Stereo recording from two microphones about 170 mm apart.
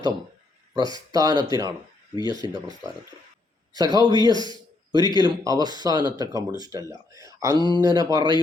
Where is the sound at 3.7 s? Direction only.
25° right (ahead or behind).